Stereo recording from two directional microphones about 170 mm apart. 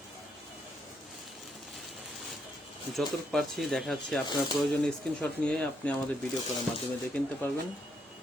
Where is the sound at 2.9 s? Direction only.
Centre (ahead or behind).